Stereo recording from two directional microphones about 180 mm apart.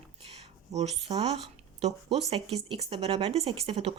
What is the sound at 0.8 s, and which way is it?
Speech, 35° right (ahead or behind).